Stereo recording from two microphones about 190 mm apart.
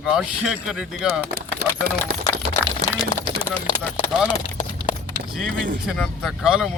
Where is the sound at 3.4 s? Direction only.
25° left (ahead or behind).